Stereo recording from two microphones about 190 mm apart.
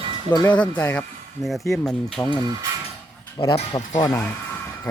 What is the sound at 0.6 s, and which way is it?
Speech, 5° left (ahead or behind).